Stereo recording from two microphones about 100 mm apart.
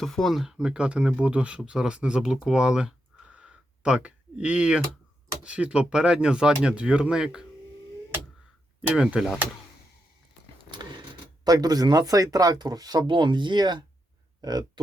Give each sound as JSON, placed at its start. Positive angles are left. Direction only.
{"t": 0.0, "sound": "speech", "side_deg": 5}
{"t": 9.0, "sound": "speech", "side_deg": -10}
{"t": 11.4, "sound": "speech", "side_deg": -40}